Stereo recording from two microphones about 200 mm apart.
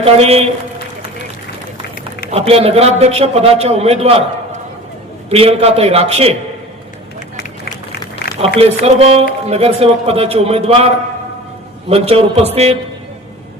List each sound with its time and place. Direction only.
0.0 s a man's voice: 30° right (ahead or behind)
2.3 s a man's voice: 30° right (ahead or behind)
5.3 s speech: 30° right (ahead or behind)
8.4 s a man's voice: 30° right (ahead or behind)